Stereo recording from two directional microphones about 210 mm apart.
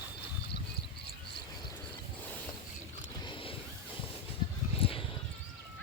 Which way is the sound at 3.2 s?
25° left (ahead or behind).